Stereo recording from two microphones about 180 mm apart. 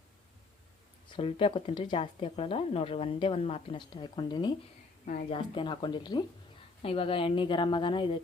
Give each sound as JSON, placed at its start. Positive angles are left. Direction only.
{"t": 1.1, "sound": "speech", "side_deg": 30}